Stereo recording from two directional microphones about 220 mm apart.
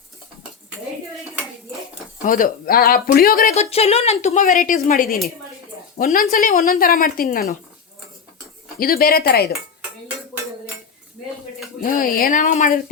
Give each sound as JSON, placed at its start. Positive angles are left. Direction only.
{"t": 2.2, "sound": "a woman's voice", "side_deg": 35}
{"t": 3.5, "sound": "a woman's voice", "side_deg": 30}
{"t": 8.8, "sound": "speech", "side_deg": 45}
{"t": 11.8, "sound": "a woman's voice", "side_deg": 40}